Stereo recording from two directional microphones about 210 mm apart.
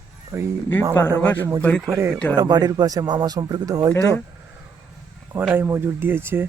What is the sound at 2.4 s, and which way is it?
Speech, 20° right (ahead or behind).